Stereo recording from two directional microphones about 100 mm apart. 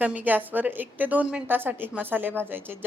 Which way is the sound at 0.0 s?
15° right (ahead or behind).